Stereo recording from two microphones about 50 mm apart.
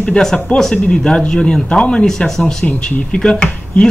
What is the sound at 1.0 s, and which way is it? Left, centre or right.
Speech, centre.